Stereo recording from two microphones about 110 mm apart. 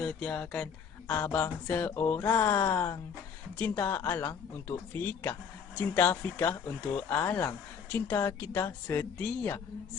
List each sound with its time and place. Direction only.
0.0 s speech: 5° left (ahead or behind)